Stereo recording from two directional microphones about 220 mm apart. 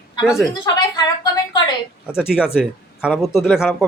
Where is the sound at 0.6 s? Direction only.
15° left (ahead or behind).